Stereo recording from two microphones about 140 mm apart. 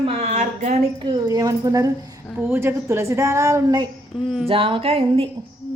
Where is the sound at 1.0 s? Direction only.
30° right (ahead or behind).